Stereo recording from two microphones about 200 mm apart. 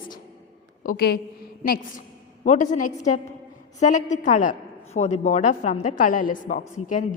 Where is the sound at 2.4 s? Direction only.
40° left (ahead or behind).